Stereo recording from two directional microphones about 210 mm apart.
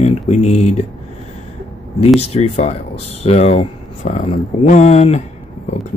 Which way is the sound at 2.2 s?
30° left (ahead or behind).